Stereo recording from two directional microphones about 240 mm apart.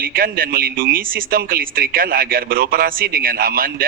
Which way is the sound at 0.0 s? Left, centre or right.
Right.